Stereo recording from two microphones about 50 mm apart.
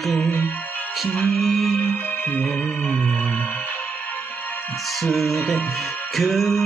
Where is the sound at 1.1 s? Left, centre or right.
Centre.